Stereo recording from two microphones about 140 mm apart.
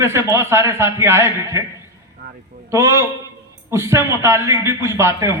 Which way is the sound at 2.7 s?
20° right (ahead or behind).